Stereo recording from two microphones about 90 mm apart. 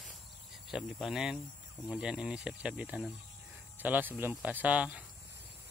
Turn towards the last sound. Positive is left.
turn(degrees=-15)  # may be behind; listen again after turning